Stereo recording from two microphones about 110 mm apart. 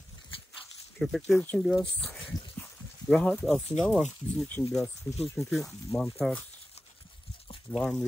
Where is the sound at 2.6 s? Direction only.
10° left (ahead or behind).